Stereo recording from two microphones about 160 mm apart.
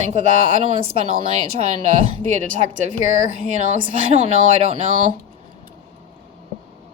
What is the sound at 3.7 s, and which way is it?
Speech, 45° right (ahead or behind).